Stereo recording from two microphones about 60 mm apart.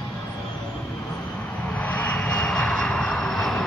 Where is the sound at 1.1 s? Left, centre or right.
Left.